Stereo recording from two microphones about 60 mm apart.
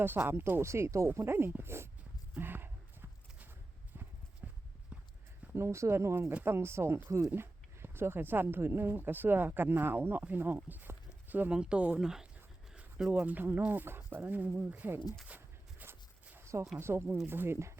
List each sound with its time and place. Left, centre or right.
0.0 s speech: right
0.6 s speech: right
2.3 s clip-clop: right
4.4 s clip-clop: right
5.5 s speech: right
11.5 s speech: centre
13.1 s speech: right
15.8 s dog: right
16.8 s speech: right